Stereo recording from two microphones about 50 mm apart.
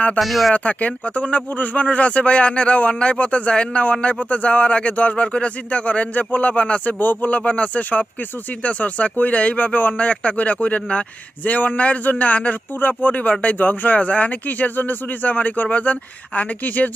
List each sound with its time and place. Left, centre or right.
0.2 s speech: centre
0.5 s speech: left
7.0 s speech: left